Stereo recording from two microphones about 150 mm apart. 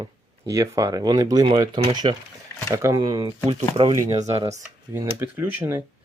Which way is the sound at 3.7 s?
35° right (ahead or behind).